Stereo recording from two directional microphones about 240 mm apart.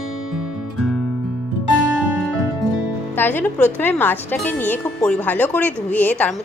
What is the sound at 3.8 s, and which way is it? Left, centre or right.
A woman's voice, centre.